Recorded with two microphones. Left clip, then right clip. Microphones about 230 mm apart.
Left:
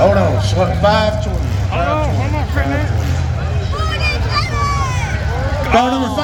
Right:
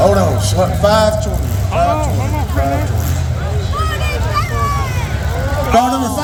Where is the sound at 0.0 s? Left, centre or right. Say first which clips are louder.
Even; right.